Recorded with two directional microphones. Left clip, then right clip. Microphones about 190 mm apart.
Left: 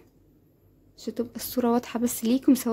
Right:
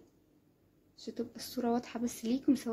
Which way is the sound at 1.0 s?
35° left (ahead or behind).